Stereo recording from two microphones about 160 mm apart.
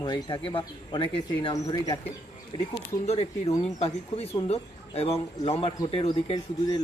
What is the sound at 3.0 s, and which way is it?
Speech, 40° left (ahead or behind).